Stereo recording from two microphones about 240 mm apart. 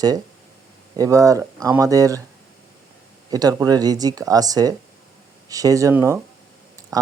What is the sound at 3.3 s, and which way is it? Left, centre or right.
Speech, centre.